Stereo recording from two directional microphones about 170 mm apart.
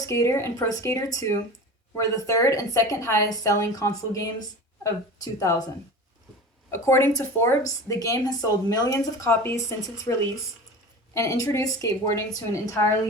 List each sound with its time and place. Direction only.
0.0 s a woman's voice: 20° left (ahead or behind)
6.7 s a woman's voice: 15° left (ahead or behind)